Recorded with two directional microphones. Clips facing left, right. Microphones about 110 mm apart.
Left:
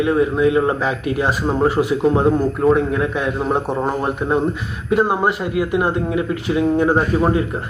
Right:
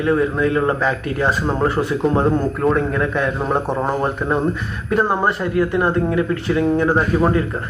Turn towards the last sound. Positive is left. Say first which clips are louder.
# even
turn(degrees=15)  # may be behind; listen again after turning